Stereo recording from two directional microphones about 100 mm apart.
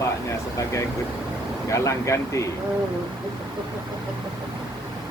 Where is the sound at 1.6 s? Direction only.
30° left (ahead or behind).